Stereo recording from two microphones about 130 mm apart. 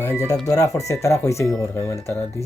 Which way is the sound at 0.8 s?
25° left (ahead or behind).